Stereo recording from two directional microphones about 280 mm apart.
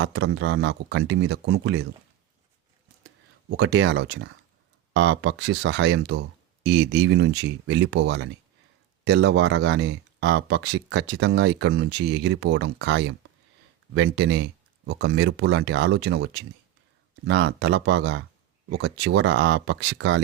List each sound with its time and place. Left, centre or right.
0.0 s speech: right
3.6 s speech: right